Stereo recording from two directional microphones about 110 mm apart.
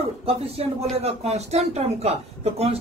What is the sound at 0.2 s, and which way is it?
Speech, 60° right (ahead or behind).